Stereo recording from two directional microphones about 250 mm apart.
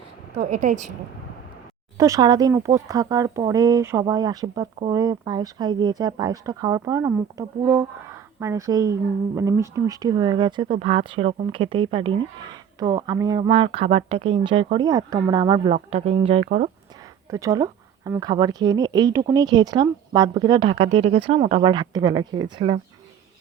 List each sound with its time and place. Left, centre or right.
0.3 s speech: right
2.0 s speech: centre
17.3 s speech: centre